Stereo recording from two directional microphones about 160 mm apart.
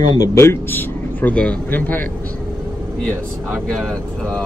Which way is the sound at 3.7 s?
Centre (ahead or behind).